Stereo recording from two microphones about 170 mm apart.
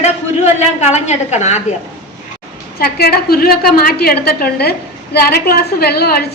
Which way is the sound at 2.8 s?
65° left (ahead or behind).